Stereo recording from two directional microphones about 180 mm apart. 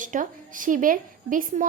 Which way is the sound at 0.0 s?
45° right (ahead or behind).